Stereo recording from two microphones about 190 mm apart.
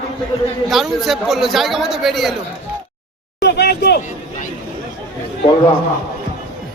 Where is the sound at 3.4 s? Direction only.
60° left (ahead or behind).